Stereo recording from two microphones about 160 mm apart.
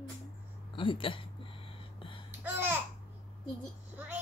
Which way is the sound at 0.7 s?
30° left (ahead or behind).